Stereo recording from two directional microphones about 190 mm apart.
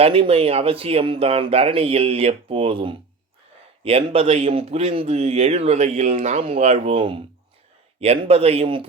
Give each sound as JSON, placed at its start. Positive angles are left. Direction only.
{"t": 0.0, "sound": "speech", "side_deg": -30}